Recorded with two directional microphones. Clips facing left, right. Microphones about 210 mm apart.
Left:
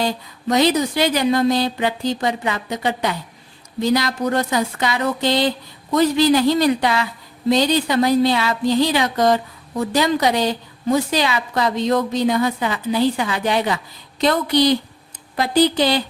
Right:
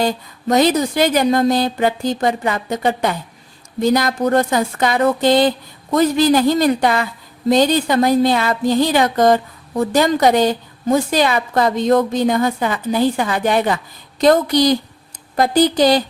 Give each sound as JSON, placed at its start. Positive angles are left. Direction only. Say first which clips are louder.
{"t": 0.4, "sound": "speech", "louder": "right 2 dB", "side_deg": -45}